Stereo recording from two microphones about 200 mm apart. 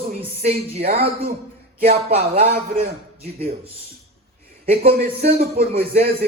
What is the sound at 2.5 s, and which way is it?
Speech, 50° right (ahead or behind).